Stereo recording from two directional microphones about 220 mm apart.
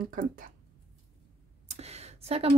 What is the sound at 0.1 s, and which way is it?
Speech, 40° right (ahead or behind).